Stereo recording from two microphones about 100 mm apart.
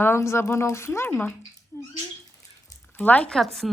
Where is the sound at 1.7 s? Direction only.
20° left (ahead or behind).